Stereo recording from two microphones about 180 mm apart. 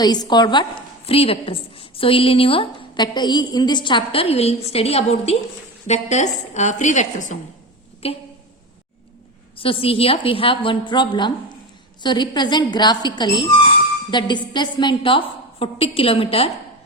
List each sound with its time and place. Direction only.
0.0 s a woman's voice: 20° left (ahead or behind)
9.6 s a woman's voice: 30° left (ahead or behind)